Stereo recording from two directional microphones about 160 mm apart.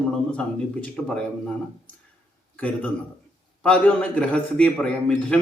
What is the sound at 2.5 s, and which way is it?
A man's voice, 10° left (ahead or behind).